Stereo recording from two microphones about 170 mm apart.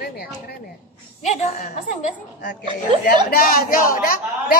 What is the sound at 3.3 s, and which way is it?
Speech, 60° left (ahead or behind).